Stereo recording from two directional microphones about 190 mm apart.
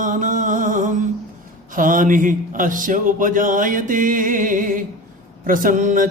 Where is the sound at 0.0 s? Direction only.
45° right (ahead or behind).